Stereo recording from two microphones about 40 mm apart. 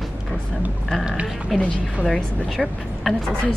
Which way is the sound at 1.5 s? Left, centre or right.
Centre.